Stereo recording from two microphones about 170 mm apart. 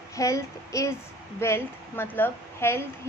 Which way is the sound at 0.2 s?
20° left (ahead or behind).